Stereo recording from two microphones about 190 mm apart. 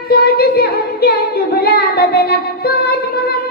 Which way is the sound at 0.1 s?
55° left (ahead or behind).